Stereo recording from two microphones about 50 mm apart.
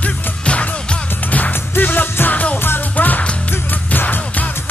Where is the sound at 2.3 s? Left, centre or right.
Left.